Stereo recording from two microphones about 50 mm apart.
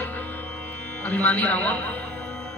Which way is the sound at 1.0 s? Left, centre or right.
Left.